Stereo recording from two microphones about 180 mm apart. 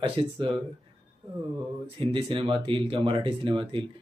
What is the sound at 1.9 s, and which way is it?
Speech, 30° right (ahead or behind).